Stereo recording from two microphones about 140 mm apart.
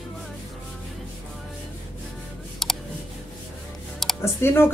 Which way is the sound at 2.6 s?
Centre (ahead or behind).